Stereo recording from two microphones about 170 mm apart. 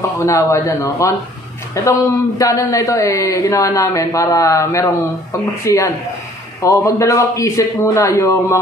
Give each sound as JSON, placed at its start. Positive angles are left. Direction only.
{"t": 0.2, "sound": "a man's voice", "side_deg": 20}